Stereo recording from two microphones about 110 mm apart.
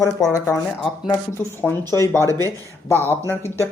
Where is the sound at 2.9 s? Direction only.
20° left (ahead or behind).